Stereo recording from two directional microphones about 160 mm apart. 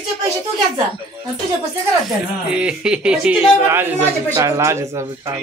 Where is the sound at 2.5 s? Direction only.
5° right (ahead or behind).